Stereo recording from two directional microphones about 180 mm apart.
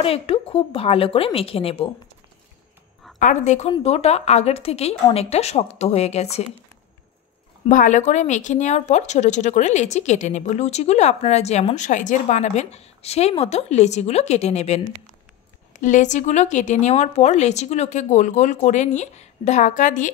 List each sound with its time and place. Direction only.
0.0 s speech: 30° left (ahead or behind)
3.2 s speech: 45° left (ahead or behind)
7.6 s speech: 45° left (ahead or behind)